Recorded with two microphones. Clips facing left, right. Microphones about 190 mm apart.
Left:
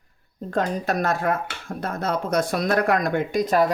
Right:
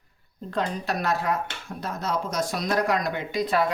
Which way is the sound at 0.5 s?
50° left (ahead or behind).